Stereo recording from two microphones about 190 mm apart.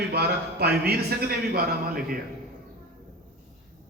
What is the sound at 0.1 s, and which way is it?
A man's voice, 55° right (ahead or behind).